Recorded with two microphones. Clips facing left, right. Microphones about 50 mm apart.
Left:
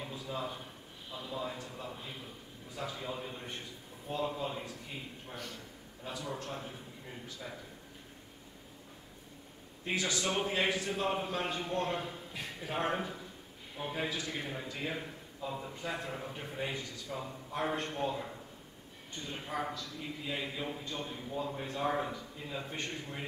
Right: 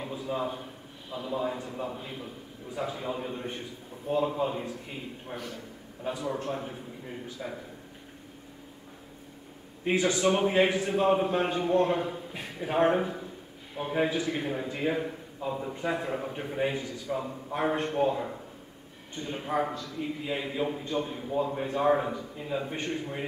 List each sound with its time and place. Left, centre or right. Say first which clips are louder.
0.1 s a sound: right 9 dB; right
1.1 s a man's voice: right 8 dB; right
5.3 s a man's voice: right 6 dB; centre
6.0 s a man's voice: right 8 dB; right
9.8 s a man's voice: right 9 dB; right